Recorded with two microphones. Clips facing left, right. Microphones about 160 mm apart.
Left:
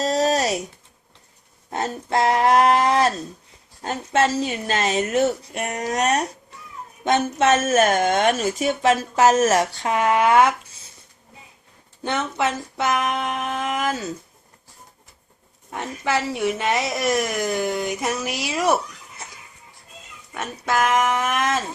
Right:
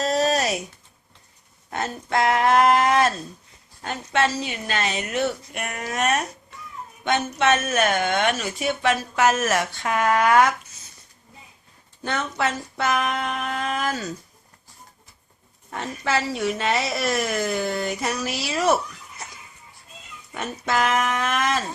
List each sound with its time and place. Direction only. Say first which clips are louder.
0.0 s a sound: left 1 dB; 35° left (ahead or behind)
1.7 s speech: left 2 dB; 35° left (ahead or behind)
9.8 s speech: right 2 dB; 25° left (ahead or behind)
12.0 s speech: left 2 dB; 15° left (ahead or behind)
15.7 s speech: left 1 dB; 15° left (ahead or behind)
20.3 s speech: left 1 dB; 5° left (ahead or behind)